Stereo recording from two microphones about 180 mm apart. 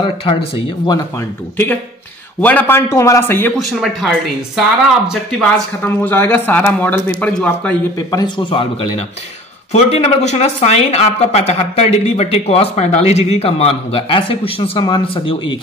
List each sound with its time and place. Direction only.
0.0 s speech: 30° left (ahead or behind)
2.4 s a man's voice: 10° left (ahead or behind)
3.5 s speech: centre (ahead or behind)
5.9 s a man's voice: 10° left (ahead or behind)
8.1 s a man's voice: 25° left (ahead or behind)